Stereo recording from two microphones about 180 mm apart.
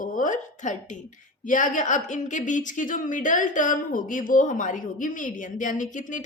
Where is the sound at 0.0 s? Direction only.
45° left (ahead or behind).